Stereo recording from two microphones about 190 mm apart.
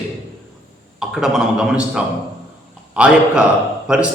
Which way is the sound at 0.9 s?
5° right (ahead or behind).